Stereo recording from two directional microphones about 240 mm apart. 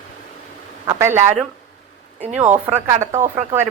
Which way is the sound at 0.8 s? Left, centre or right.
Centre.